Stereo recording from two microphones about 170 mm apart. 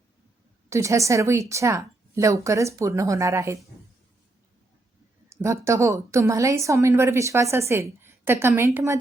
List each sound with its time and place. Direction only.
0.7 s a woman's voice: 15° right (ahead or behind)
5.3 s a woman's voice: 15° right (ahead or behind)